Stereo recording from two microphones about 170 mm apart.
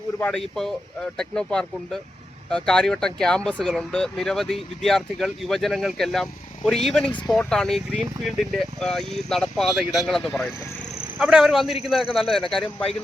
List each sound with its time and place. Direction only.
0.2 s speech: 5° left (ahead or behind)